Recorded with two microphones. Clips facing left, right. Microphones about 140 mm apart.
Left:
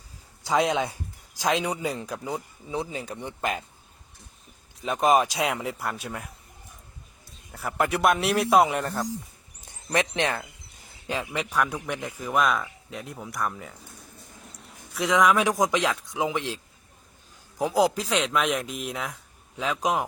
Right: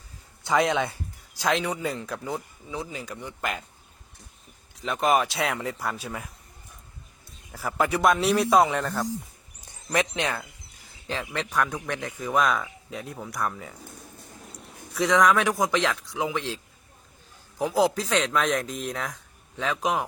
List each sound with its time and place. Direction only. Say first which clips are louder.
1.4 s speech: even; 15° left (ahead or behind)
2.6 s speech: left 5 dB; 25° left (ahead or behind)
4.8 s speech: left 2 dB; 15° left (ahead or behind)
5.7 s a man's voice: even; centre (ahead or behind)
7.8 s a man's voice: right 1 dB; centre (ahead or behind)
9.9 s speech: left 1 dB; 25° left (ahead or behind)
11.0 s a man's voice: left 1 dB; 15° left (ahead or behind)
14.6 s a sound: right 3 dB; centre (ahead or behind)
15.4 s speech: left 1 dB; 15° left (ahead or behind)
17.6 s speech: left 1 dB; 15° left (ahead or behind)
18.1 s a man's voice: right 1 dB; centre (ahead or behind)